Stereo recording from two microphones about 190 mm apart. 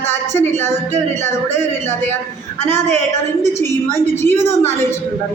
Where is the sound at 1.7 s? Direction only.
10° left (ahead or behind).